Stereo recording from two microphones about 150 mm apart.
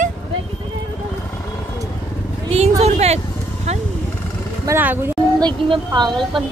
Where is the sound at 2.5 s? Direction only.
45° right (ahead or behind).